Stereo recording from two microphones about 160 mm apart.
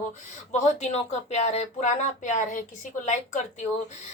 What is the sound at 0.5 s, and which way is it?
Speech, 45° left (ahead or behind).